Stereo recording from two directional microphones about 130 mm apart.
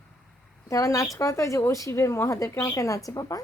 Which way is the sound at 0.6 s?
25° left (ahead or behind).